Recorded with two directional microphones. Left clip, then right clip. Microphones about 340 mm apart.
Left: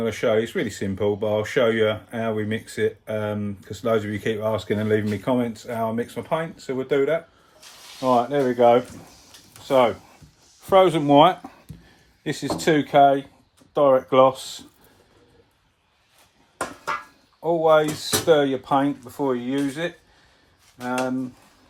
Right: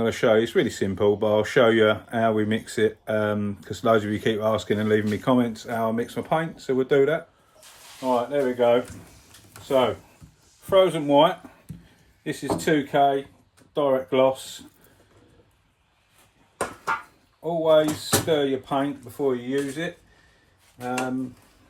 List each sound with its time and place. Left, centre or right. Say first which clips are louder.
0.0 s speech: right 1 dB; centre
8.0 s speech: left 3 dB; left
10.7 s speech: left 3 dB; left
17.4 s speech: left 2 dB; centre